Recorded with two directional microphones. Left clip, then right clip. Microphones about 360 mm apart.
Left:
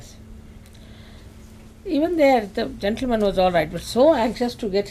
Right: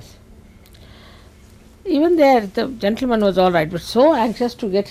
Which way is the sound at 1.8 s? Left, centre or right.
Right.